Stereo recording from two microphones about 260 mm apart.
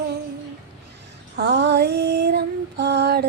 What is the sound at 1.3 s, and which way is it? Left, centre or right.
Female singing, right.